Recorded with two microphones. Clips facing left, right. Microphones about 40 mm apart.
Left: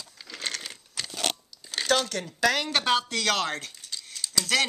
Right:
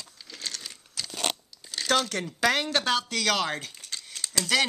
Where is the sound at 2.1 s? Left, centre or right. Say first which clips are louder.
Even; right.